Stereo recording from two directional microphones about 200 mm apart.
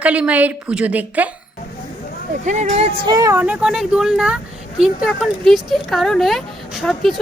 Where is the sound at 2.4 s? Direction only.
35° right (ahead or behind).